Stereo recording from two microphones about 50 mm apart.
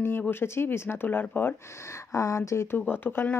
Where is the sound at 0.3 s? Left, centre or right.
Left.